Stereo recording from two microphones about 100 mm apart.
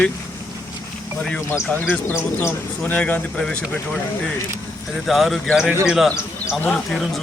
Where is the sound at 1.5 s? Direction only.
20° left (ahead or behind).